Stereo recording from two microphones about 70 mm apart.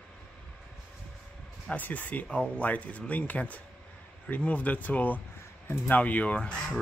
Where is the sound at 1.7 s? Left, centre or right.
Left.